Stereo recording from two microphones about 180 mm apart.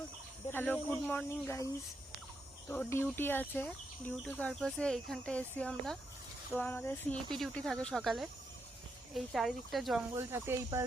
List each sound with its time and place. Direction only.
0.5 s speech: 10° left (ahead or behind)
10.2 s speech: 15° right (ahead or behind)